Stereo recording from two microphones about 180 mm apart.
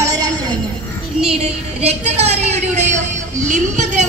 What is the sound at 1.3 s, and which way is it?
A woman's voice, 35° right (ahead or behind).